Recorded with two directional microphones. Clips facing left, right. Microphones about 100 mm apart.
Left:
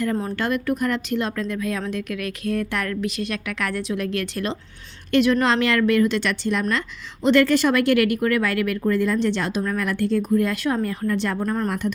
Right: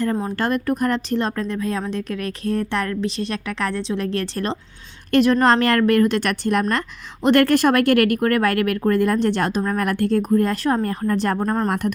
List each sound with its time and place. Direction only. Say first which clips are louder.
0.0 s a woman's voice: right 2 dB; 30° right (ahead or behind)